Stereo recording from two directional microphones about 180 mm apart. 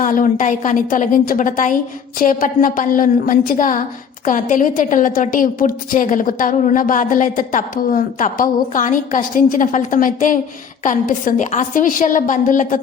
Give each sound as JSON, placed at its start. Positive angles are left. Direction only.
{"t": 0.0, "sound": "a woman's voice", "side_deg": 50}